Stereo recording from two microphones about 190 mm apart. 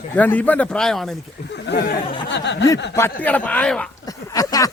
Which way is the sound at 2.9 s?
10° left (ahead or behind).